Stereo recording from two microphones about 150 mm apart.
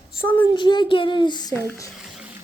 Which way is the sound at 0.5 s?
30° left (ahead or behind).